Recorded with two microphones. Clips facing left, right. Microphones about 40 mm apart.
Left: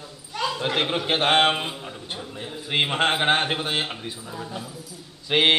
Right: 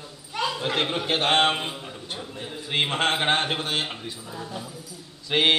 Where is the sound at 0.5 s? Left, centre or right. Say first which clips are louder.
Left 3 dB; centre.